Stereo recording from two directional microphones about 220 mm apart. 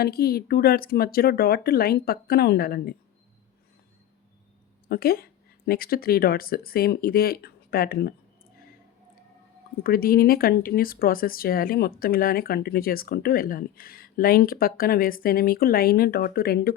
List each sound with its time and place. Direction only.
0.0 s speech: 45° left (ahead or behind)
4.9 s speech: 45° left (ahead or behind)
9.8 s speech: 40° left (ahead or behind)